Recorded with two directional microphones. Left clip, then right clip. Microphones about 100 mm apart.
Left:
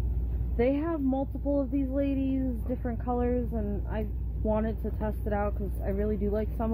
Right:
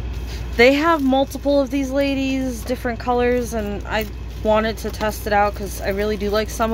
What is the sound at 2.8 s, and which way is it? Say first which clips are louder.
Speech: right 12 dB; 30° right (ahead or behind).